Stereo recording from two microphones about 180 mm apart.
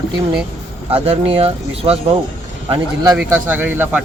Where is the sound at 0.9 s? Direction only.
35° right (ahead or behind).